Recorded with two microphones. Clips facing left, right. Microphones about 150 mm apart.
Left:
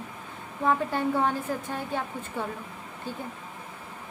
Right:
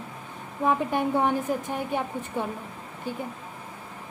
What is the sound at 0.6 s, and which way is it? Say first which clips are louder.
A woman's voice: right 1 dB; 15° right (ahead or behind).